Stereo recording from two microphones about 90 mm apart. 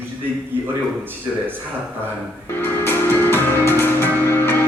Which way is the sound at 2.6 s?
25° left (ahead or behind).